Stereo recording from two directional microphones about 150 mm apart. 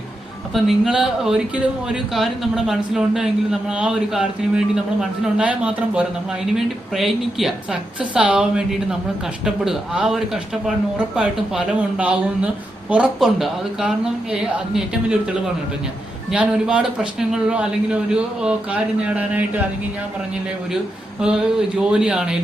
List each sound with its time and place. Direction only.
0.5 s speech: 5° right (ahead or behind)
16.3 s speech: 5° right (ahead or behind)
21.2 s speech: 5° right (ahead or behind)